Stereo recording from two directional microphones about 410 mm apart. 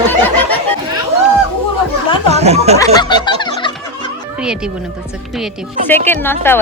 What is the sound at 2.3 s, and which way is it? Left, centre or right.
Speech, centre.